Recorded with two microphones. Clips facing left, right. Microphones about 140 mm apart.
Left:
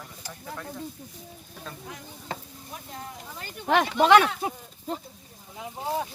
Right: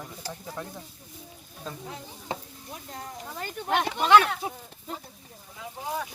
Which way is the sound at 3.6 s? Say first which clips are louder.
Left 5 dB; 85° left.